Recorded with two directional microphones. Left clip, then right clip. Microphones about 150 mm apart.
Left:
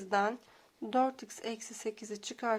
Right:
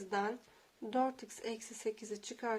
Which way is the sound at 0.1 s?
40° left (ahead or behind).